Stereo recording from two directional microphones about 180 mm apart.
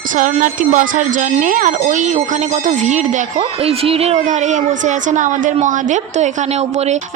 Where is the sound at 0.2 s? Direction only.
45° right (ahead or behind).